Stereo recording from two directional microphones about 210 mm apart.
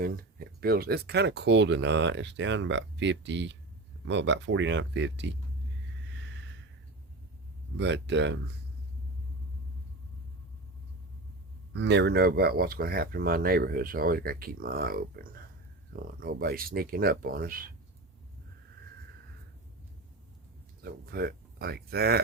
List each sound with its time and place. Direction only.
0.0 s speech: 45° right (ahead or behind)
6.1 s a sound: 60° right (ahead or behind)
7.8 s speech: 55° right (ahead or behind)
11.7 s speech: 55° right (ahead or behind)
20.8 s speech: 45° right (ahead or behind)